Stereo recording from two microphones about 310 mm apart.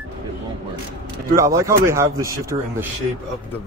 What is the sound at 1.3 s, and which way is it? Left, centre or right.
Speech, centre.